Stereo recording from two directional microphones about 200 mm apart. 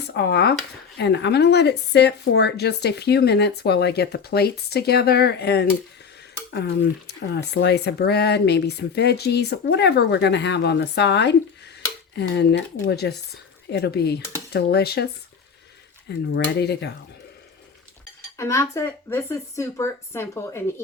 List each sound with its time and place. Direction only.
0.1 s speech: 60° left (ahead or behind)
7.1 s speech: 55° left (ahead or behind)
16.0 s speech: 55° left (ahead or behind)
18.3 s speech: 15° left (ahead or behind)